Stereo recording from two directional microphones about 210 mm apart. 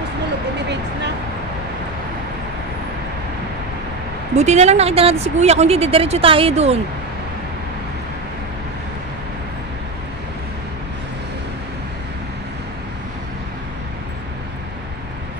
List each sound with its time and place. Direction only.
4.4 s speech: 30° right (ahead or behind)